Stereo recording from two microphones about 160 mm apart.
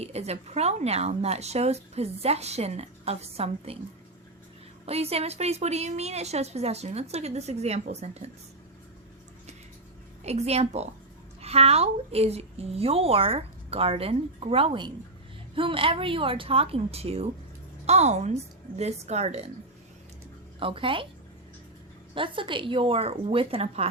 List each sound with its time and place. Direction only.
0.0 s speech: 40° right (ahead or behind)
4.9 s speech: 40° right (ahead or behind)
10.2 s a woman's voice: 40° right (ahead or behind)
20.6 s speech: 35° right (ahead or behind)
22.1 s speech: 30° right (ahead or behind)